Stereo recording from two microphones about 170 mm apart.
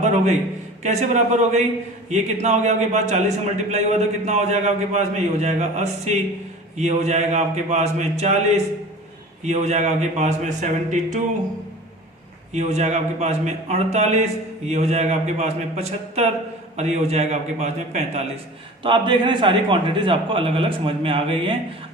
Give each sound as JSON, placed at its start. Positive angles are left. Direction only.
{"t": 0.0, "sound": "a man's voice", "side_deg": -45}
{"t": 12.5, "sound": "a man's voice", "side_deg": -40}
{"t": 18.8, "sound": "a man's voice", "side_deg": -30}